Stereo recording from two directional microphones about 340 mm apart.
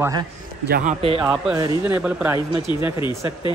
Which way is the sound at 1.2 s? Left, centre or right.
Centre.